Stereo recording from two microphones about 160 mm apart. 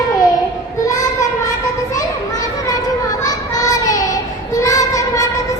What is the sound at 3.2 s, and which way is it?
Child singing, 20° left (ahead or behind).